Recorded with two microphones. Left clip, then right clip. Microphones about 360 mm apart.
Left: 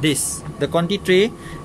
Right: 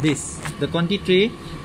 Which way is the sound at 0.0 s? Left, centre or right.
Left.